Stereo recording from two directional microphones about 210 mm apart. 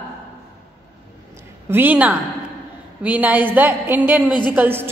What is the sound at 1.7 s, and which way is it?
A woman's voice, 10° right (ahead or behind).